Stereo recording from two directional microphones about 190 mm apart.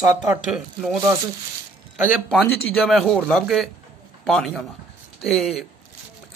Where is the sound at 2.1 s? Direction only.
Centre (ahead or behind).